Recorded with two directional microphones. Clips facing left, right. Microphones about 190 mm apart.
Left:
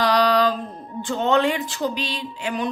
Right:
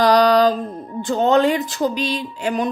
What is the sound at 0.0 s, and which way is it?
Music, 40° right (ahead or behind).